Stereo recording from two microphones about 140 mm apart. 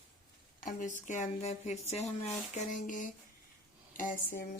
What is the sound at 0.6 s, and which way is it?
Speech, 75° left (ahead or behind).